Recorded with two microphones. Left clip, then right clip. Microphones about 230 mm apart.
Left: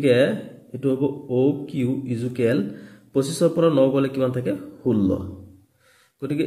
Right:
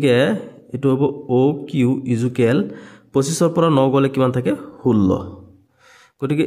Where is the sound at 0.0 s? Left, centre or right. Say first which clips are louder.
Right 2 dB; right.